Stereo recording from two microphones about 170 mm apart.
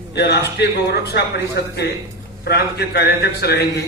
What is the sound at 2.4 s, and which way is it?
A man's voice, 70° left (ahead or behind).